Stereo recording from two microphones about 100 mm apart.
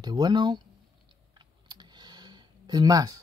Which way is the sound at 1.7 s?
45° right (ahead or behind).